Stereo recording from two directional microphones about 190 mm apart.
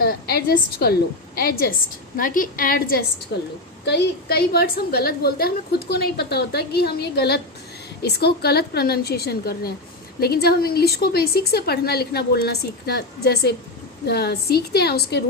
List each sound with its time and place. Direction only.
0.0 s a woman's voice: 55° left (ahead or behind)
3.8 s a woman's voice: 60° left (ahead or behind)